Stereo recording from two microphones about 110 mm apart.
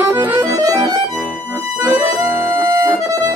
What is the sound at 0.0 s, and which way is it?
Music, 20° right (ahead or behind).